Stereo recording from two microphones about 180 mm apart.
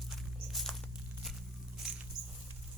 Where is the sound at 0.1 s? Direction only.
Centre (ahead or behind).